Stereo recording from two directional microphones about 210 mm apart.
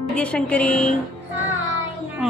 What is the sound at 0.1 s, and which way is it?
Speech, 5° left (ahead or behind).